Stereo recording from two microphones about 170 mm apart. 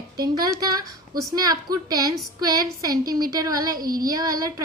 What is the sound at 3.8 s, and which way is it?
Child singing, 60° right (ahead or behind).